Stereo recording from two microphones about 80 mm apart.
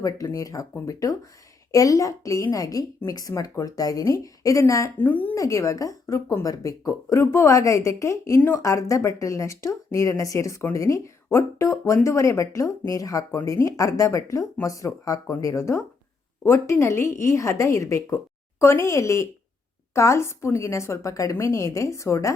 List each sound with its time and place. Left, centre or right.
0.3 s speech: left
4.9 s a woman's voice: left
5.3 s speech: left